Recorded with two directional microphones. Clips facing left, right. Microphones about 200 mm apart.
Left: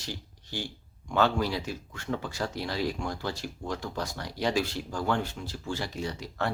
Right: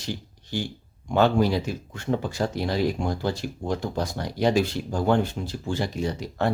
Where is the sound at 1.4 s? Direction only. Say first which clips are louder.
Right 7 dB; 50° right (ahead or behind).